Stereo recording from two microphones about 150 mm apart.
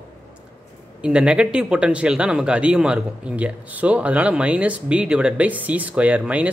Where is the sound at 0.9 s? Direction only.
5° right (ahead or behind).